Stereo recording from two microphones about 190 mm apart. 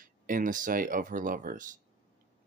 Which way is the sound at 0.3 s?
45° right (ahead or behind).